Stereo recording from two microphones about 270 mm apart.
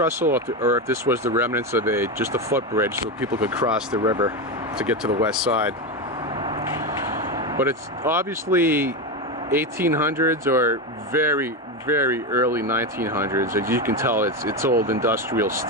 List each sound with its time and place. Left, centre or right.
0.0 s speech: centre
4.0 s speech: centre
4.7 s speech: centre
7.3 s speech: centre